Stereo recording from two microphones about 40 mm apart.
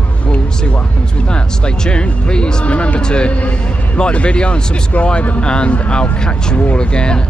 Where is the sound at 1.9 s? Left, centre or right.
Left.